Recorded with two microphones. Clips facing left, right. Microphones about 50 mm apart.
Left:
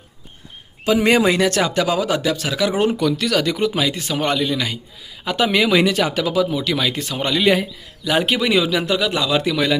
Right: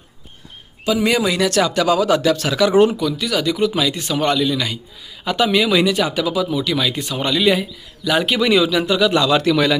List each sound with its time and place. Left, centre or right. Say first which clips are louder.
0.9 s a man's voice: left 2 dB; left; by 3.0 s centre
3.0 s speech: left 2 dB; left
3.7 s a man's voice: right 1 dB; left
9.1 s speech: right 4 dB; centre